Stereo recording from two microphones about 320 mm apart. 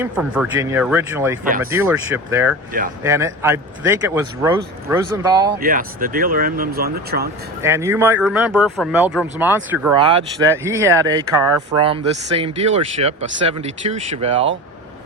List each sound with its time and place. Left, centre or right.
0.0 s speech: centre
5.5 s speech: right
7.6 s speech: centre
9.9 s speech: centre